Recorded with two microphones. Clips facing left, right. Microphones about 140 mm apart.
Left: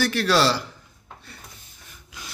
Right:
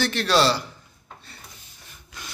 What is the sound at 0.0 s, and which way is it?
Speech, 20° right (ahead or behind).